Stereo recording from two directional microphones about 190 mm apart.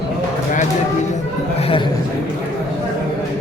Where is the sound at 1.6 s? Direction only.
30° left (ahead or behind).